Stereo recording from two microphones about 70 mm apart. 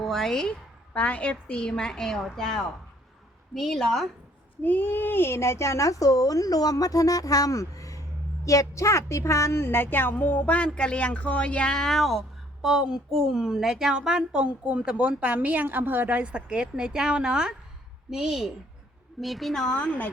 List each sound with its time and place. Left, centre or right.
0.0 s a woman's voice: centre
0.9 s a woman's voice: centre
4.6 s speech: left; by 12.2 s centre
12.6 s a woman's voice: centre
19.7 s speech: centre